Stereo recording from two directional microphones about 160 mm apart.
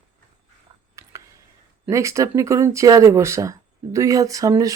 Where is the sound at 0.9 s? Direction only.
20° right (ahead or behind).